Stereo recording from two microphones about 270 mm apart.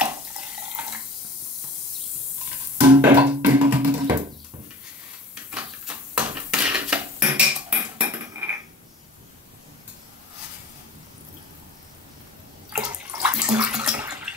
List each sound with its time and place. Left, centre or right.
2.9 s music: centre
5.3 s a sound: centre
12.7 s bathtub: centre